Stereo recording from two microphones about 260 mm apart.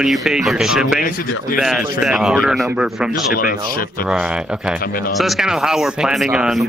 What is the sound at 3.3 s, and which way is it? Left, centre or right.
Speech, left.